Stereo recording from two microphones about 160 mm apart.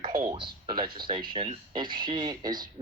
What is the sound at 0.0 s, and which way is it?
Speech, 25° right (ahead or behind).